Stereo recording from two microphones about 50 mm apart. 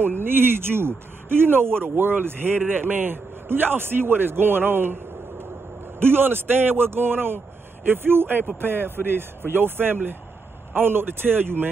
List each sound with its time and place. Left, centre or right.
0.0 s speech: right
5.9 s speech: right